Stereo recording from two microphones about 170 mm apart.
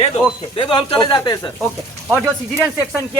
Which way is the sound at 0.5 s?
30° left (ahead or behind).